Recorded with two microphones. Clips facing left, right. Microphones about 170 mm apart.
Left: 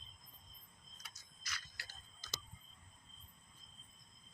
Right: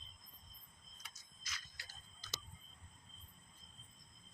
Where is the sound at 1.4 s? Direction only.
70° left (ahead or behind).